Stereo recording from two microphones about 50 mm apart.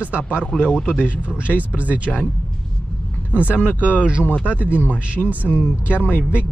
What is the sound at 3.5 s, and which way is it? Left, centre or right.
Speech, left.